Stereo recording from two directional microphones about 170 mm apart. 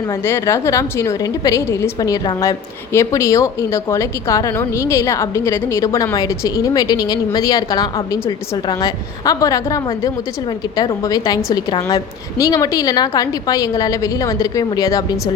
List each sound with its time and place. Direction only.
0.1 s a woman's voice: 15° left (ahead or behind)